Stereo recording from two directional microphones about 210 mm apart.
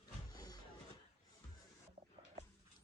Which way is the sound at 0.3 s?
20° left (ahead or behind).